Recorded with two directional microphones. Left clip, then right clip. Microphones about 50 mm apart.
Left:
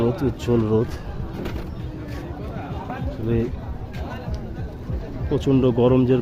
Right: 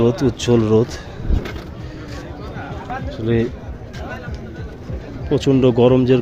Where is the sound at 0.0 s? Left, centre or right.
Right.